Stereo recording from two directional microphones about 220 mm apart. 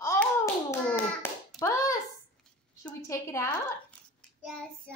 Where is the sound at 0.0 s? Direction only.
15° left (ahead or behind).